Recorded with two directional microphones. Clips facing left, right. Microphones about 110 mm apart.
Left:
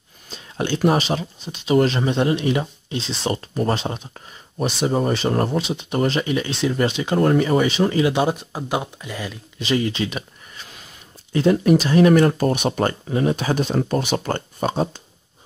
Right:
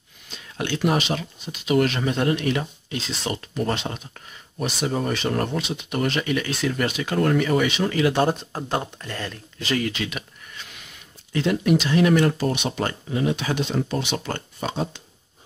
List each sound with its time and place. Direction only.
0.3 s speech: 30° left (ahead or behind)
8.2 s speech: 10° left (ahead or behind)
9.6 s speech: 20° left (ahead or behind); by 15.0 s 40° left (ahead or behind)